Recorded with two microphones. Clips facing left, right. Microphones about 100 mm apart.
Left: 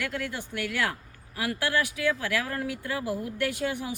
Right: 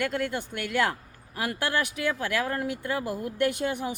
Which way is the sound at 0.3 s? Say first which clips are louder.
Right 1 dB; 30° right (ahead or behind).